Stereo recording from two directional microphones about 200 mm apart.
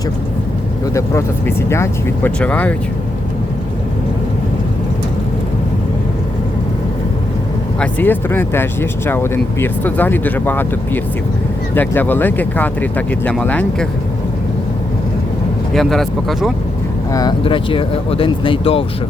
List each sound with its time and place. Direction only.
0.9 s speech: 15° left (ahead or behind)
7.8 s speech: 10° left (ahead or behind)
15.7 s speech: centre (ahead or behind)
17.1 s speech: 20° left (ahead or behind)